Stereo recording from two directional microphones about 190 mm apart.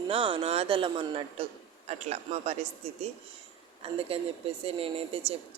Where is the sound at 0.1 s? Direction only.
30° right (ahead or behind).